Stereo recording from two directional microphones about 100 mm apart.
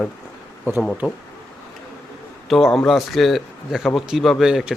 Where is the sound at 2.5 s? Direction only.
Centre (ahead or behind).